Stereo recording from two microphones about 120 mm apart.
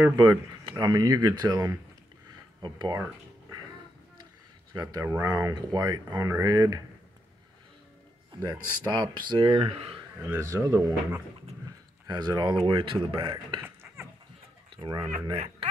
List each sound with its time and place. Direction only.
0.1 s speech: 30° right (ahead or behind)
4.7 s speech: 25° right (ahead or behind)
8.4 s speech: 35° right (ahead or behind)
10.3 s speech: 25° right (ahead or behind)
12.1 s speech: 35° right (ahead or behind)
13.8 s dog: 15° right (ahead or behind)
14.8 s speech: 45° right (ahead or behind)
15.3 s speech: 55° right (ahead or behind)